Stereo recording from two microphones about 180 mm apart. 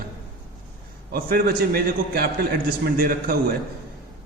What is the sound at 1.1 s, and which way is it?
A man's voice, 55° right (ahead or behind).